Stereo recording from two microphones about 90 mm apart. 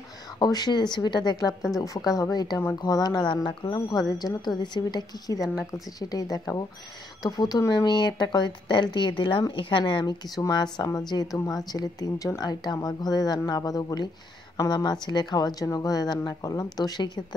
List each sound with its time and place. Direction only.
0.4 s a woman's voice: 50° left (ahead or behind)
10.3 s speech: 45° left (ahead or behind)